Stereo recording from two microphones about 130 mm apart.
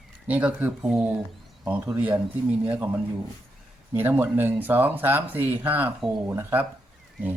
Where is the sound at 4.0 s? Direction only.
15° right (ahead or behind).